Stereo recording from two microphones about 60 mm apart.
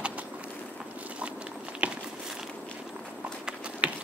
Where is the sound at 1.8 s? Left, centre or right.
Right.